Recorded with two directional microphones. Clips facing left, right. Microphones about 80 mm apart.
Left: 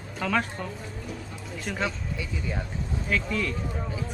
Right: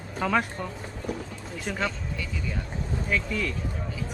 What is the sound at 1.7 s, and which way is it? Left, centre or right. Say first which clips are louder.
Speech: even; centre.